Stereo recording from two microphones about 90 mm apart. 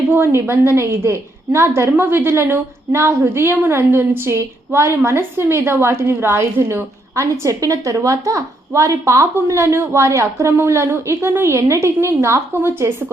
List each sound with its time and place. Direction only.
0.1 s a woman's voice: 25° right (ahead or behind)